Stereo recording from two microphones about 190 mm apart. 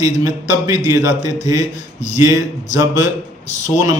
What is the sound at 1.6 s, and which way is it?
Speech, 35° left (ahead or behind).